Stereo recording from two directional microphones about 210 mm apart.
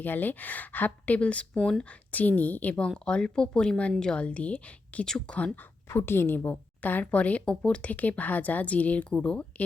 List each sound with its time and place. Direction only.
0.0 s speech: 10° left (ahead or behind)